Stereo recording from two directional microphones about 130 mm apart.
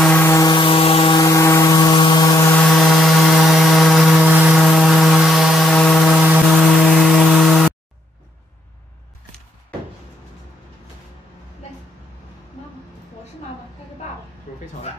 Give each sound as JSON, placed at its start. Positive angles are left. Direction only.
{"t": 0.2, "sound": "vehicle", "side_deg": 25}
{"t": 0.5, "sound": "vehicle", "side_deg": 40}
{"t": 1.2, "sound": "vehicle", "side_deg": 25}
{"t": 2.7, "sound": "a sound", "side_deg": 0}
{"t": 6.4, "sound": "chainsaw", "side_deg": -5}